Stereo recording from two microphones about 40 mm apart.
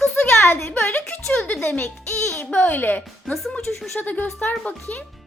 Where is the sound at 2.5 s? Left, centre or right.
Left.